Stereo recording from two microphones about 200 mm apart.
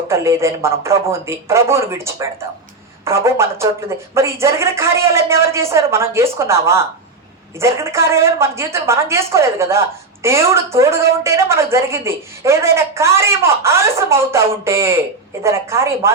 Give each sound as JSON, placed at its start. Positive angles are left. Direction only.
{"t": 0.1, "sound": "a woman's voice", "side_deg": -15}